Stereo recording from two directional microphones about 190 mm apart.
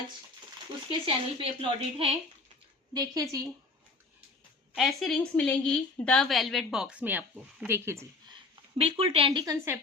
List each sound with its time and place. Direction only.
0.9 s speech: 30° right (ahead or behind)
2.9 s speech: 20° right (ahead or behind)
4.7 s a woman's voice: centre (ahead or behind)
8.8 s speech: 30° right (ahead or behind)